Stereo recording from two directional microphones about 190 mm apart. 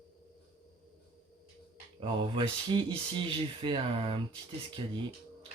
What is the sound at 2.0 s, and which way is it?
Speech, 25° right (ahead or behind).